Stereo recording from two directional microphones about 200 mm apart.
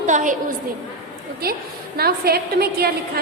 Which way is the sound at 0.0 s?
40° right (ahead or behind).